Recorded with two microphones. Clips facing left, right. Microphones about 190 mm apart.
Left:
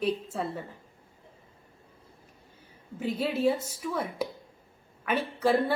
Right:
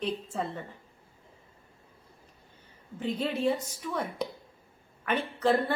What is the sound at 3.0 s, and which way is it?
A woman's voice, 5° left (ahead or behind).